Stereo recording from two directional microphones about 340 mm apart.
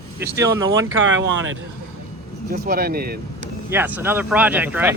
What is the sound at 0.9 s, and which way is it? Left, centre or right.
Speech, right.